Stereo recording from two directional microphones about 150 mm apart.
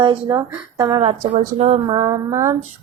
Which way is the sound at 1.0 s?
45° right (ahead or behind).